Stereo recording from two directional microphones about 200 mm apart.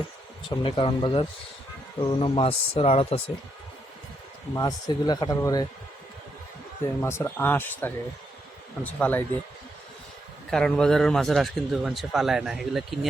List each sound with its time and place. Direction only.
0.4 s speech: 25° left (ahead or behind)
4.5 s speech: 20° left (ahead or behind)
7.0 s speech: 10° left (ahead or behind)
10.5 s a man's voice: 5° left (ahead or behind)